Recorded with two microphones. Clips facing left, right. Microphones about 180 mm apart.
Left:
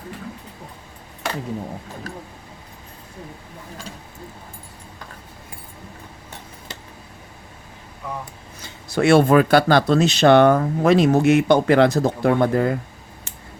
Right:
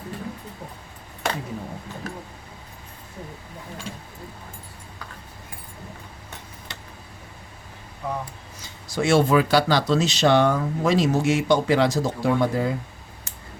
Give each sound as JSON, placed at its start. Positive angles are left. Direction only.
{"t": 8.6, "sound": "speech", "side_deg": 60}